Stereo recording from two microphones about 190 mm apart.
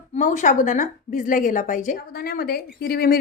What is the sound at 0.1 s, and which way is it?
Speech, 40° left (ahead or behind).